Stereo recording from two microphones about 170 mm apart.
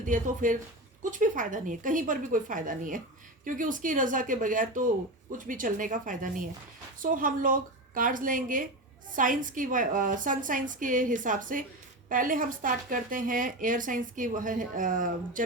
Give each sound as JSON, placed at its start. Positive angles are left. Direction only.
{"t": 0.0, "sound": "speech", "side_deg": -50}